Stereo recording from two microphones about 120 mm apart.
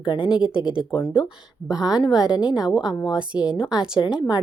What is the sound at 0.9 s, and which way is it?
Speech, 40° left (ahead or behind).